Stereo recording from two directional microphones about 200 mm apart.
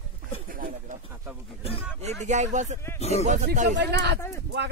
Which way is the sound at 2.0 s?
35° right (ahead or behind).